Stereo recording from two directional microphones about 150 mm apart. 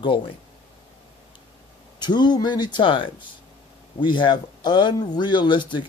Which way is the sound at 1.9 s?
30° left (ahead or behind).